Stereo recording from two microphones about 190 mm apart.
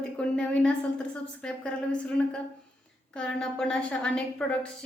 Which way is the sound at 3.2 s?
5° left (ahead or behind).